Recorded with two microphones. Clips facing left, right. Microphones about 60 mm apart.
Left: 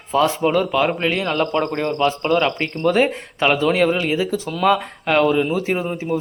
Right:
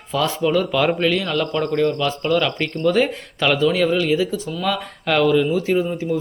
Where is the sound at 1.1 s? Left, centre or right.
Left.